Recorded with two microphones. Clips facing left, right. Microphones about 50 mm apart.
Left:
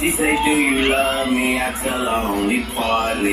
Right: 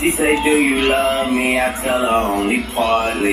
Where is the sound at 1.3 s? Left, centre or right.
Centre.